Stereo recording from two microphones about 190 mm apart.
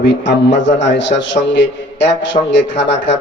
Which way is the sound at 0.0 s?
70° left (ahead or behind).